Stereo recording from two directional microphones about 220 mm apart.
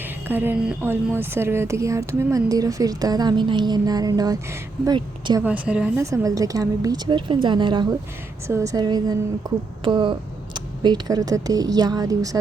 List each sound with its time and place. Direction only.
0.3 s a woman's voice: 10° right (ahead or behind)
5.4 s a woman's voice: 5° right (ahead or behind)